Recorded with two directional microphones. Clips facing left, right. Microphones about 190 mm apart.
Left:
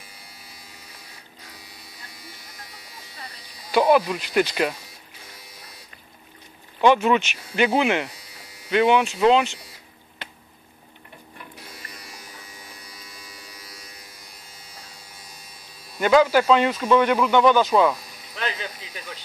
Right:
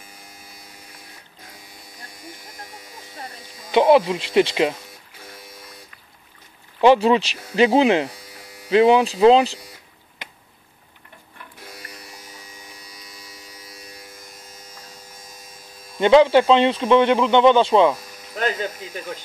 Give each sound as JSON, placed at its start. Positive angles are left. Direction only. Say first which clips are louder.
{"t": 2.0, "sound": "electric shaver", "louder": "right 7 dB", "side_deg": -50}
{"t": 3.7, "sound": "speech", "louder": "right 3 dB", "side_deg": -25}
{"t": 6.8, "sound": "speech", "louder": "right 3 dB", "side_deg": -30}
{"t": 12.9, "sound": "electric shaver", "louder": "right 1 dB", "side_deg": -20}
{"t": 14.2, "sound": "electric shaver", "louder": "right 4 dB", "side_deg": -45}
{"t": 16.0, "sound": "speech", "louder": "right 4 dB", "side_deg": -25}
{"t": 17.9, "sound": "speech", "louder": "right 6 dB", "side_deg": -45}